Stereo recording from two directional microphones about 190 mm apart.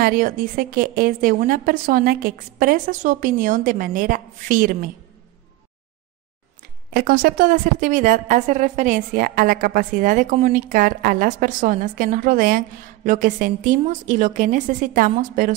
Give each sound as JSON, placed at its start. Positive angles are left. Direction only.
{"t": 0.0, "sound": "a woman's voice", "side_deg": -45}
{"t": 6.9, "sound": "a woman's voice", "side_deg": -55}